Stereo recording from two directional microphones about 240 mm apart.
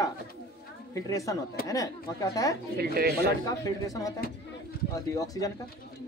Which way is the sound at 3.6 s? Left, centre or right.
Centre.